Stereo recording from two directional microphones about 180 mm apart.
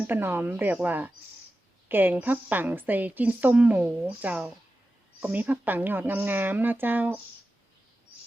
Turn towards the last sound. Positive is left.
turn(degrees=-10)  # may be behind; listen again after turning